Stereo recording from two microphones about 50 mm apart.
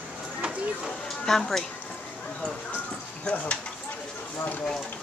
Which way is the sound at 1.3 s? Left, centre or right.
Centre.